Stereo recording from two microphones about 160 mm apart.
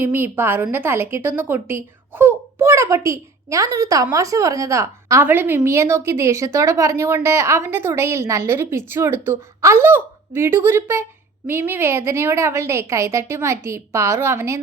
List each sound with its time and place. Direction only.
0.0 s a woman's voice: 15° right (ahead or behind)